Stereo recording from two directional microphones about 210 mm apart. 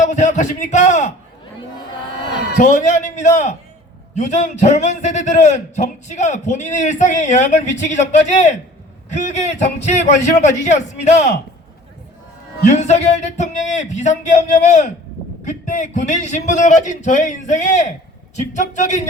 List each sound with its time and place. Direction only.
0.0 s a man's voice: 35° left (ahead or behind)
2.6 s a man's voice: 35° left (ahead or behind)
12.6 s a man's voice: 35° left (ahead or behind)